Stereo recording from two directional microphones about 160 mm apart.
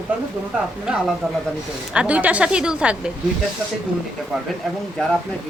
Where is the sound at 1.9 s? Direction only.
10° right (ahead or behind).